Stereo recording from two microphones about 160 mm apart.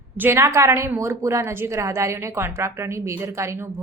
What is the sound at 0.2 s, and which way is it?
A woman's voice, 15° right (ahead or behind).